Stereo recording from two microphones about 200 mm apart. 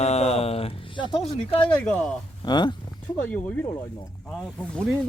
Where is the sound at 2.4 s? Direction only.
20° left (ahead or behind).